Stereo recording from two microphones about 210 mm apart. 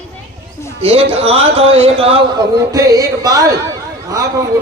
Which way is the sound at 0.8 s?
25° right (ahead or behind).